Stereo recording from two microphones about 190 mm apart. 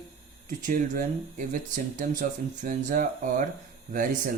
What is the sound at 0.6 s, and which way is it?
Speech, 45° right (ahead or behind).